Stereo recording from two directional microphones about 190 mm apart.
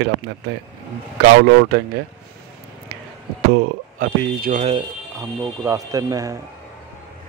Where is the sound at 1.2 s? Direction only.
50° right (ahead or behind).